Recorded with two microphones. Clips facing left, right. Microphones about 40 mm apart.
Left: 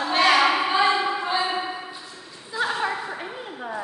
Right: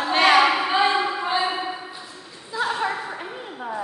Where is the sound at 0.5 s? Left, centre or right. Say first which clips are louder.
Even; centre.